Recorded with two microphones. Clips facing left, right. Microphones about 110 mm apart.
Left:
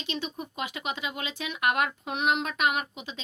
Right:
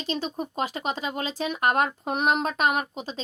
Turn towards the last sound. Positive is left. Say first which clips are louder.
# right 4 dB
turn(degrees=-35)  # may be behind; listen again after turning